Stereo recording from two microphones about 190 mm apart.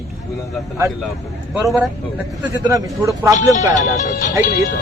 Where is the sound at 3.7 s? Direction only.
40° left (ahead or behind).